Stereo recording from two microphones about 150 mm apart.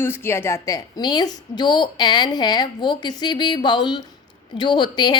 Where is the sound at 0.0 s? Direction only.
15° left (ahead or behind).